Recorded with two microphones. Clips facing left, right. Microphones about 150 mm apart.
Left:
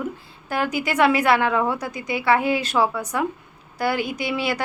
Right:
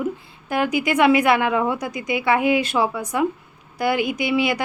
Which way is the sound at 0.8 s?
15° right (ahead or behind).